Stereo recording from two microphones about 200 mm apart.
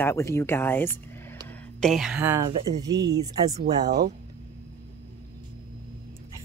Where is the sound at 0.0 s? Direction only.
15° left (ahead or behind); by 3.9 s 20° right (ahead or behind).